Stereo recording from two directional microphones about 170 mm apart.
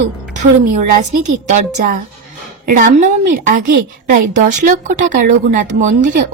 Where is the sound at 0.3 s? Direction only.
50° right (ahead or behind).